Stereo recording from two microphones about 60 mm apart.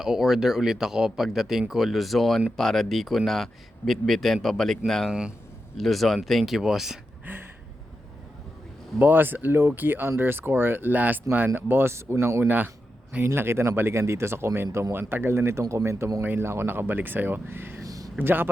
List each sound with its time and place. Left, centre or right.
0.0 s a man's voice: centre
7.3 s a sound: right
9.0 s speech: right
12.5 s speech: right
13.2 s speech: right
16.2 s speech: right
17.8 s a sound: right
18.2 s speech: right